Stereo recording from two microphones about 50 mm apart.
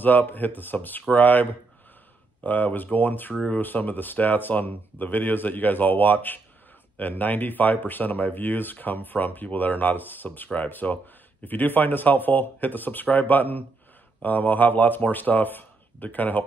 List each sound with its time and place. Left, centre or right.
0.0 s speech: left